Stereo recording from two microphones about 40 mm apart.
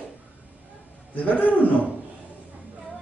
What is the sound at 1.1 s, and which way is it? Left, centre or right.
Speech, left.